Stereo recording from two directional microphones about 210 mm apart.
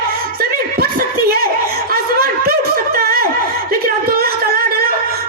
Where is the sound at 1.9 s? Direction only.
45° right (ahead or behind).